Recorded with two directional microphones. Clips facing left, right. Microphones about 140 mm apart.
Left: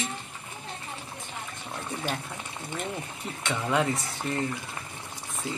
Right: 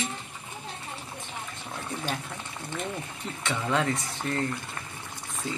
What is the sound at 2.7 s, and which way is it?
Speech, 15° left (ahead or behind).